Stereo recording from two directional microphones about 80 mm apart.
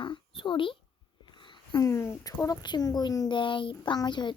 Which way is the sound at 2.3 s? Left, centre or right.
Left.